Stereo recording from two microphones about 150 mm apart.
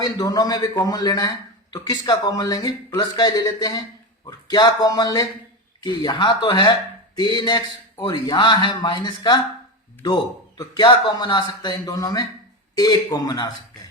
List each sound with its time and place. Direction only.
0.0 s speech: 25° left (ahead or behind)
10.6 s speech: 30° left (ahead or behind)